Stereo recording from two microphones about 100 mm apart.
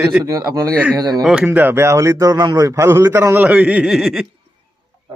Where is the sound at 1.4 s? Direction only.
20° right (ahead or behind).